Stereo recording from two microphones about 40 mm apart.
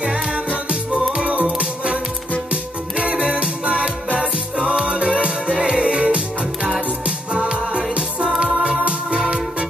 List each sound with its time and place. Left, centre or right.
0.0 s music: right
8.6 s organ: right